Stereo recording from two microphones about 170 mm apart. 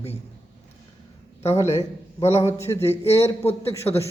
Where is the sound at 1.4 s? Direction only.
15° left (ahead or behind).